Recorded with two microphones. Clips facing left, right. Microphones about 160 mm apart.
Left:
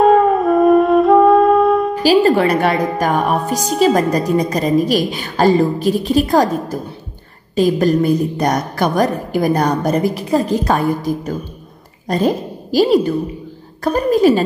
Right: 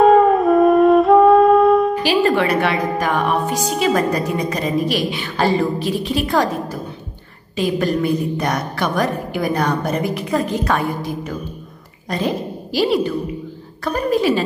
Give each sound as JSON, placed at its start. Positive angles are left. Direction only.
{"t": 0.0, "sound": "wind instrument", "side_deg": 0}
{"t": 2.0, "sound": "a woman's voice", "side_deg": 40}